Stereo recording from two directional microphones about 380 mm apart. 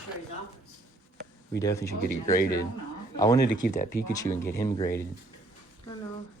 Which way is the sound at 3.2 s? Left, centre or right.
Centre.